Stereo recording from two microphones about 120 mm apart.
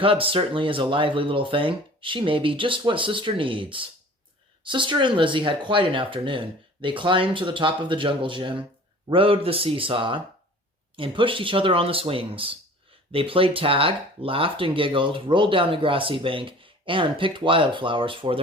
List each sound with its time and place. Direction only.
0.0 s speech: 50° right (ahead or behind)